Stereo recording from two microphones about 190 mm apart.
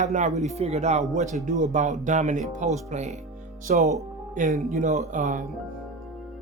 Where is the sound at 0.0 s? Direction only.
40° right (ahead or behind).